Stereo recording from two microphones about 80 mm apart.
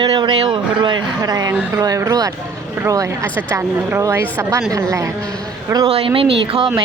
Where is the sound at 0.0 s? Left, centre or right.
Right.